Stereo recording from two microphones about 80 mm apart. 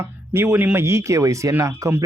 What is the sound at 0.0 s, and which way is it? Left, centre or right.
Speech, right.